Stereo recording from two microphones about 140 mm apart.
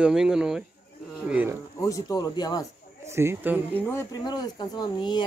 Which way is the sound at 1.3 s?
15° right (ahead or behind).